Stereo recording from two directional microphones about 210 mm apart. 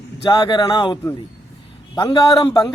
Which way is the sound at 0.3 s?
20° left (ahead or behind).